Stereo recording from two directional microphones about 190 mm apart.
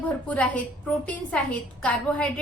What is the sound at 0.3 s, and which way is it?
A woman's voice, 5° left (ahead or behind).